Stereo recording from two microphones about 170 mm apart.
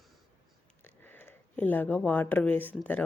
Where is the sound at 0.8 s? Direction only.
10° left (ahead or behind).